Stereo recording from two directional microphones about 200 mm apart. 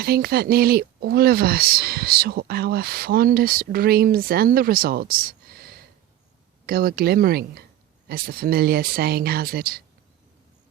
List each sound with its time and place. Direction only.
0.0 s speech: 50° right (ahead or behind)